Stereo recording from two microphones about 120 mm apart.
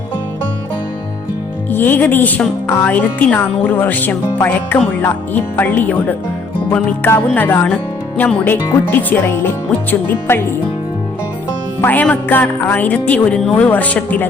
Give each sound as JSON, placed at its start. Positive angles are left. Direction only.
{"t": 1.7, "sound": "speech", "side_deg": 15}
{"t": 11.8, "sound": "speech", "side_deg": 15}